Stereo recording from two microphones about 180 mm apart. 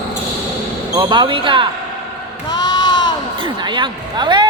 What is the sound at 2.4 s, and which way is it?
Sheep, 25° left (ahead or behind).